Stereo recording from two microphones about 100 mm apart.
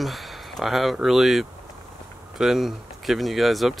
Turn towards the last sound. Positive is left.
turn(degrees=0)  # may be behind; listen again after turning